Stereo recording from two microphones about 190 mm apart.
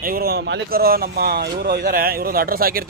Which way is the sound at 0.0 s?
50° right (ahead or behind).